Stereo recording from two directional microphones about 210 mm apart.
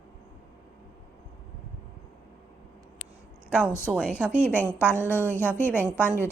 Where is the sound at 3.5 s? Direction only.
5° right (ahead or behind).